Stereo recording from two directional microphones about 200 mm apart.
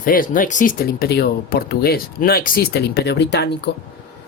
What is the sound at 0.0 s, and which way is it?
Speech, 45° left (ahead or behind).